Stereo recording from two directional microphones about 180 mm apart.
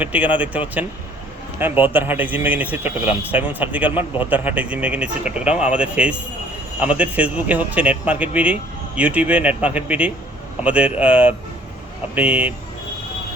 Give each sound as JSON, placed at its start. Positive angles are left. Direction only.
{"t": 0.0, "sound": "speech", "side_deg": -10}